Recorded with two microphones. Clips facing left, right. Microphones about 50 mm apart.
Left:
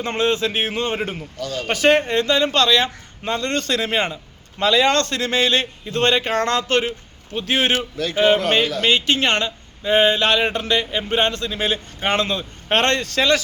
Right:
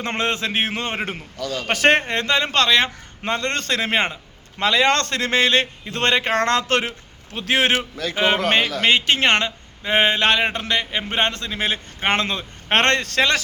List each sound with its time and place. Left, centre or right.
0.0 s a man's voice: right
0.9 s speech: right
1.7 s a man's voice: right
7.3 s a man's voice: right
8.1 s a man's voice: right
12.8 s a man's voice: right